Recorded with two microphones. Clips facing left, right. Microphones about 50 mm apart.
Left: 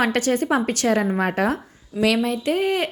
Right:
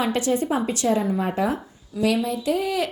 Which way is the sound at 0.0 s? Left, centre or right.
Left.